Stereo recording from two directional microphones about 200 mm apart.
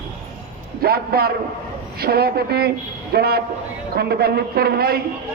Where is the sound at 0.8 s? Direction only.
50° right (ahead or behind).